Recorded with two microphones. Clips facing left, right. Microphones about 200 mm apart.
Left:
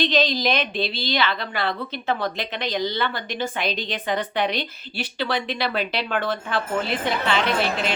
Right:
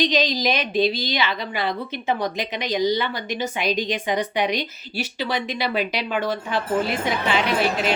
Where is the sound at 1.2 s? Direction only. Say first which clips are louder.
Even; 10° right (ahead or behind).